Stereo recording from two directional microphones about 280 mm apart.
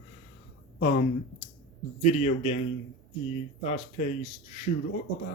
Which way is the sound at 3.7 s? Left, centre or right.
Left.